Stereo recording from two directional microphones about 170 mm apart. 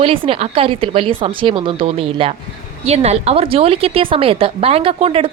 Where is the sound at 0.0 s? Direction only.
35° right (ahead or behind).